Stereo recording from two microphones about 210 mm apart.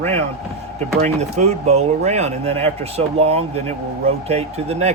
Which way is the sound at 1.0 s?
30° right (ahead or behind).